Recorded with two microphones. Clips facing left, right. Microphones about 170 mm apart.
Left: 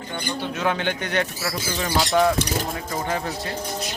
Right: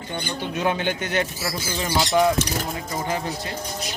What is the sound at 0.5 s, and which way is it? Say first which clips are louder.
Speech: right 2 dB; 15° right (ahead or behind).